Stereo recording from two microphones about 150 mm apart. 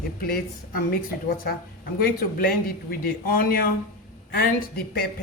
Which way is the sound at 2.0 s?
75° left (ahead or behind).